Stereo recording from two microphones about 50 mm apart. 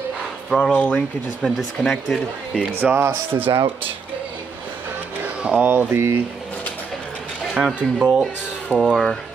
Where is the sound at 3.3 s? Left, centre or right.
Right.